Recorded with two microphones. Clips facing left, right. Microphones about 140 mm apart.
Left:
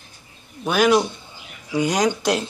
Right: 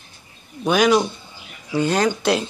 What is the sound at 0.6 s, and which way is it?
Speech, 5° left (ahead or behind).